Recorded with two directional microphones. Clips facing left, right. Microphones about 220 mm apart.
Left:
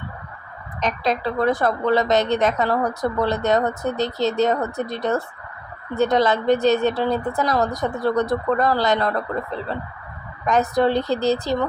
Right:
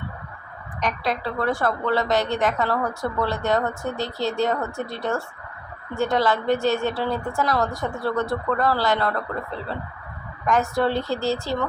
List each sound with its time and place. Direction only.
0.8 s speech: 20° left (ahead or behind)
10.4 s speech: 20° left (ahead or behind)